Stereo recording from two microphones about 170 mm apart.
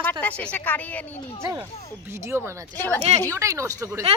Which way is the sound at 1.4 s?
15° right (ahead or behind).